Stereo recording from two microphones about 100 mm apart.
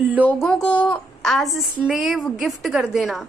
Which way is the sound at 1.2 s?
Centre (ahead or behind).